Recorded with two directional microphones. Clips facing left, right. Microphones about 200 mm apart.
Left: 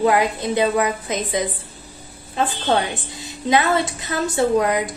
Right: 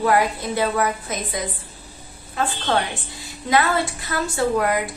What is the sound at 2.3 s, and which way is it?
A woman's voice, 20° left (ahead or behind).